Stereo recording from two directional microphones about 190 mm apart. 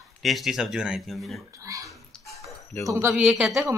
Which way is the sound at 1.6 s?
15° right (ahead or behind).